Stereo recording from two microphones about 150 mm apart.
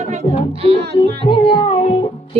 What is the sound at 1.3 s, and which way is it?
Music, 35° left (ahead or behind).